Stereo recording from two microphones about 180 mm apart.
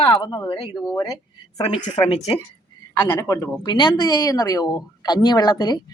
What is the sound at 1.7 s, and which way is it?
Speech, 30° left (ahead or behind).